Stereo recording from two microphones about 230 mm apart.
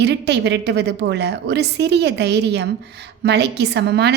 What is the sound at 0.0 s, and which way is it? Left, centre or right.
A woman's voice, right.